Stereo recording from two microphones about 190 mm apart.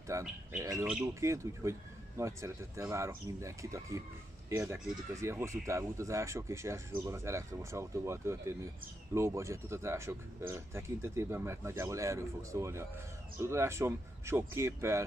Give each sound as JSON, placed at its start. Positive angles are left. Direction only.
{"t": 0.1, "sound": "speech", "side_deg": -15}